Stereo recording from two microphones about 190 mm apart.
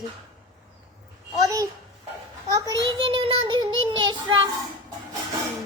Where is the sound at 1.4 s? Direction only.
20° right (ahead or behind).